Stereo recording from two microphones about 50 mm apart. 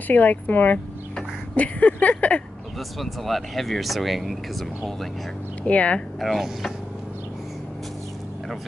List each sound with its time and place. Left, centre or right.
0.1 s speech: left
3.0 s speech: centre
5.6 s speech: left
6.1 s speech: centre